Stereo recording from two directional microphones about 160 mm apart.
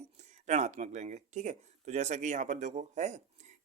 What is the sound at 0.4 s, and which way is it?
Speech, 45° right (ahead or behind).